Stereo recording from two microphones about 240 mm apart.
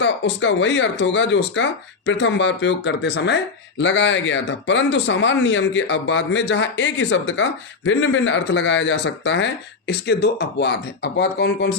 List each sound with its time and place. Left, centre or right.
0.0 s speech: left